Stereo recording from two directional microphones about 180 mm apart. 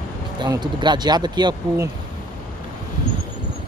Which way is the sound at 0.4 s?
25° right (ahead or behind).